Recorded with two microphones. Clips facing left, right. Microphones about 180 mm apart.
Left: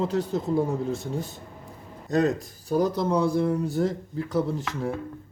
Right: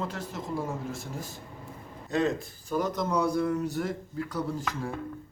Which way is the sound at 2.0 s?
40° left (ahead or behind).